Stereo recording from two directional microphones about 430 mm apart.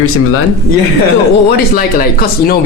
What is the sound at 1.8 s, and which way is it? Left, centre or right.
Speech, left.